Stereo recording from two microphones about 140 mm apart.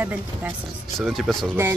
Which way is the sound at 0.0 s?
10° right (ahead or behind).